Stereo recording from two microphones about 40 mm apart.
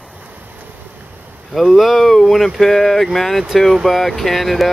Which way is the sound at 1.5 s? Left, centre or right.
Centre.